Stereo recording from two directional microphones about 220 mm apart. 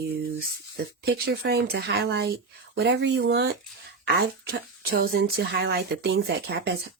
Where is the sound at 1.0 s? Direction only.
45° right (ahead or behind).